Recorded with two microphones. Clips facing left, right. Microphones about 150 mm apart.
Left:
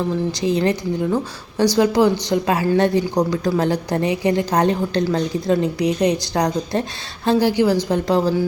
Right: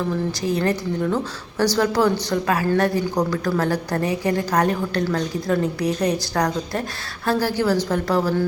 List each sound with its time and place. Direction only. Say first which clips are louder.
0.3 s a woman's voice: left 4 dB; 20° left (ahead or behind)